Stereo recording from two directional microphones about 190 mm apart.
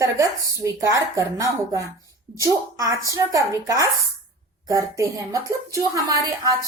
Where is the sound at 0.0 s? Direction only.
15° right (ahead or behind).